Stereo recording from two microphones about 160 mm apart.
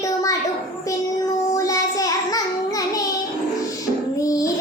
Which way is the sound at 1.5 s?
20° left (ahead or behind).